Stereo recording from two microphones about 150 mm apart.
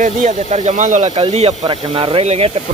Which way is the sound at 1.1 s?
40° right (ahead or behind).